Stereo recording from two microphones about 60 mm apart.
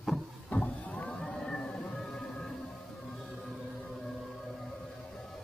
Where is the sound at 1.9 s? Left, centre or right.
Centre.